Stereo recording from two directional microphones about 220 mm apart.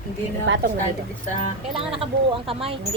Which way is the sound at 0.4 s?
55° right (ahead or behind).